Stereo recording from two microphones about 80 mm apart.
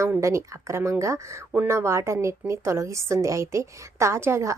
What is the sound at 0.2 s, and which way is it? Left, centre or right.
A woman's voice, right.